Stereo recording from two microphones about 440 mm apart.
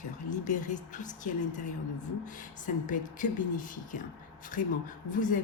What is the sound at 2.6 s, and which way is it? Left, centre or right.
Speech, centre.